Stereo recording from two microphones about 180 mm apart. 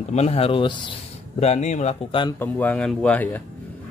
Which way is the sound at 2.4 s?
10° left (ahead or behind).